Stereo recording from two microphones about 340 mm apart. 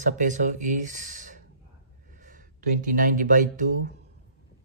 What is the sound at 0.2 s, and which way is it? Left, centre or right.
Speech, right.